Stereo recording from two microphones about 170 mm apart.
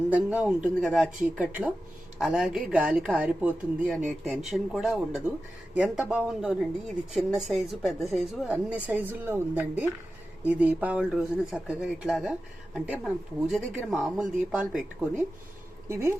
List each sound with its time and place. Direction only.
0.1 s speech: 10° right (ahead or behind)
15.9 s speech: 15° right (ahead or behind)